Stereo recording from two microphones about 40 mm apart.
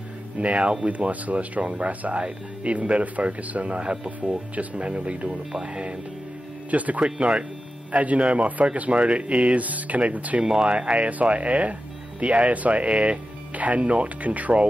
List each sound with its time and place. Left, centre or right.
0.4 s speech: right
5.3 s speech: centre
6.7 s speech: right
7.2 s speech: right
7.9 s speech: right
10.4 s speech: centre; by 14.7 s right